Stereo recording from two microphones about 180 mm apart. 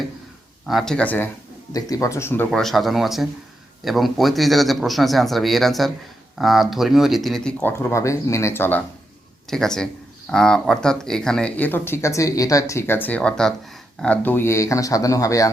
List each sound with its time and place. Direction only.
0.7 s speech: centre (ahead or behind)
2.5 s speech: centre (ahead or behind); by 15.4 s 20° left (ahead or behind)